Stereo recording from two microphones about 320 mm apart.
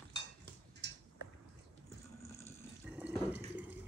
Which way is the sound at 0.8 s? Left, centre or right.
Right.